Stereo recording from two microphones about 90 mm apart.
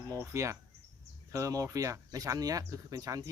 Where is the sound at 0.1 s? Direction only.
35° right (ahead or behind).